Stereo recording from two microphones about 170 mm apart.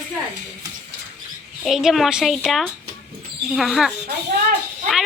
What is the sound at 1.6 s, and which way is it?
A woman's voice, centre (ahead or behind).